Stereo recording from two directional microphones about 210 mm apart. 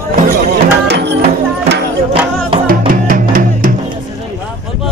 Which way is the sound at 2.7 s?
40° right (ahead or behind).